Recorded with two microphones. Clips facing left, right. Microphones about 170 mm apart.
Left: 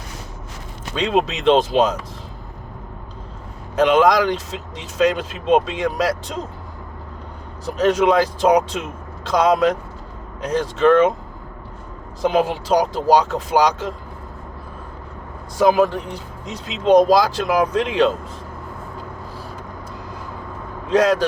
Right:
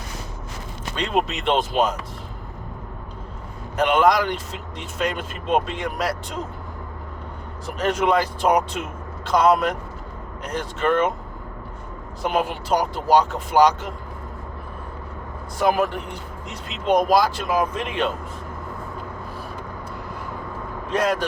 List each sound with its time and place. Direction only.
0.9 s speech: 90° left
3.8 s speech: 90° left
7.8 s speech: 90° left
12.2 s speech: 90° left
15.5 s speech: 90° left
20.9 s speech: 90° left